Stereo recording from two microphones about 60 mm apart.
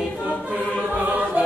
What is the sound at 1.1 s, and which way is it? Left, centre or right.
Music, right.